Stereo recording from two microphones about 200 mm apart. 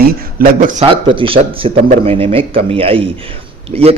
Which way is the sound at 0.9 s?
25° right (ahead or behind).